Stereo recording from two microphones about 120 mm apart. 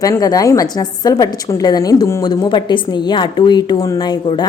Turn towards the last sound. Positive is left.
turn(degrees=35)  # may be behind; listen again after turning